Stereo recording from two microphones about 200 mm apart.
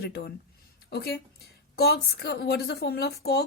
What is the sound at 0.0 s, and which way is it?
A woman's voice, 50° left (ahead or behind).